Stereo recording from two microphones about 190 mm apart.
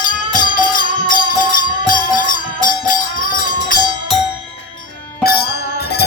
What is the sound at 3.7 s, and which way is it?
Music, 45° left (ahead or behind).